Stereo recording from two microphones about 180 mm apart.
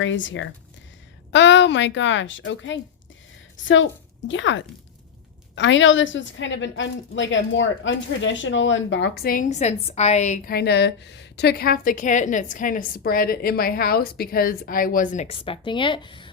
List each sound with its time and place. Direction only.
0.0 s a woman's voice: 90° left; by 16.3 s 25° left (ahead or behind)